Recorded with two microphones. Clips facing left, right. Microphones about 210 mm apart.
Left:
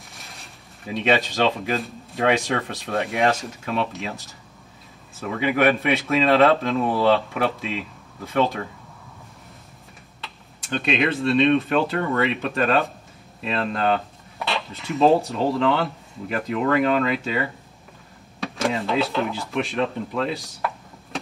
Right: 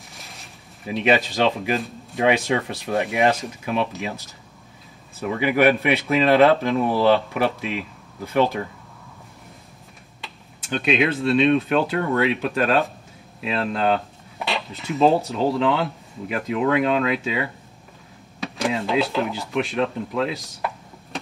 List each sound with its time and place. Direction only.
0.1 s speech: centre (ahead or behind)
5.2 s speech: 5° right (ahead or behind)
10.2 s speech: centre (ahead or behind)